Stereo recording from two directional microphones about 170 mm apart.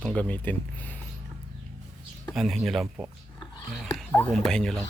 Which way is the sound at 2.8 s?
15° right (ahead or behind).